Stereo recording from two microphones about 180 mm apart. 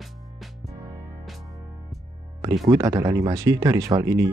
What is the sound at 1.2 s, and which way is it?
Music, centre (ahead or behind).